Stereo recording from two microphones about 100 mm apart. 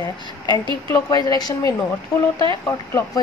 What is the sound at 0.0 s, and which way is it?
A woman's voice, 45° left (ahead or behind).